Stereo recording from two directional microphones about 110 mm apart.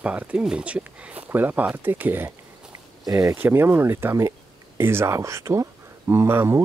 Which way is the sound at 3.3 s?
20° right (ahead or behind).